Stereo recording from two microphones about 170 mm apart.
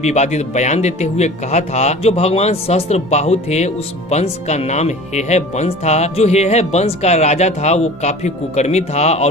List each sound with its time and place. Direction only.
0.0 s speech: 40° left (ahead or behind)